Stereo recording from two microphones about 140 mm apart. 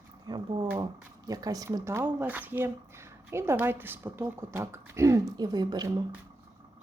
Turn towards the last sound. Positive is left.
turn(degrees=-30)  # may be behind; listen again after turning